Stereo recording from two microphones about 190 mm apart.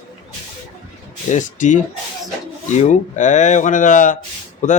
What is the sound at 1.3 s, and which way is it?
Speech, 40° left (ahead or behind).